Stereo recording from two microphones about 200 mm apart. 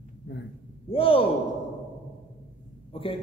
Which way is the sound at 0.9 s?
30° left (ahead or behind).